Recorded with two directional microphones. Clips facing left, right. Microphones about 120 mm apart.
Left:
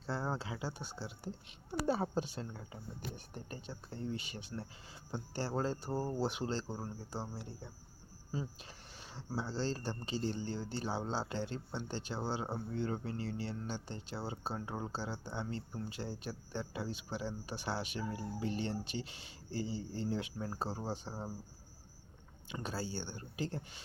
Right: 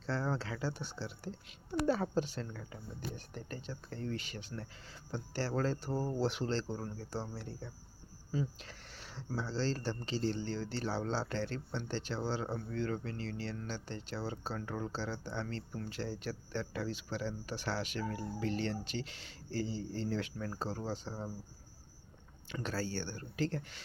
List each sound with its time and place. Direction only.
0.0 s speech: 10° left (ahead or behind)
4.5 s speech: 25° left (ahead or behind)
9.1 s speech: 15° left (ahead or behind)
22.6 s speech: 10° left (ahead or behind)